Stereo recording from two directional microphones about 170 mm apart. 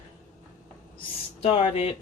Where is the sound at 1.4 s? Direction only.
35° left (ahead or behind).